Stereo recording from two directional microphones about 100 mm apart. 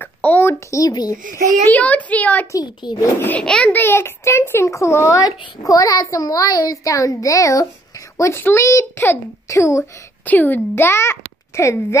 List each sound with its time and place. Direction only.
0.0 s a child's voice: 15° left (ahead or behind); by 1.4 s 40° left (ahead or behind)
1.7 s a woman's voice: 15° left (ahead or behind)
2.5 s a child's voice: 45° left (ahead or behind)
3.0 s speech: 20° left (ahead or behind)
3.4 s a woman's voice: 10° left (ahead or behind)
3.7 s a child's voice: 20° left (ahead or behind)
10.2 s speech: 20° left (ahead or behind)